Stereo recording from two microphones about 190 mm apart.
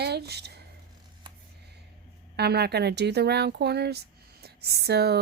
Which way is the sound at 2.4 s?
60° right (ahead or behind).